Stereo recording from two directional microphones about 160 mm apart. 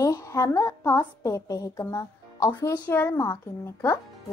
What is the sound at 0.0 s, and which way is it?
A woman's voice, 20° left (ahead or behind).